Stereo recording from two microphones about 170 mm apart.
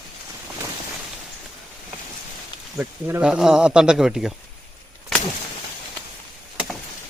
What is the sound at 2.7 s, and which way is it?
A man's voice, 5° right (ahead or behind).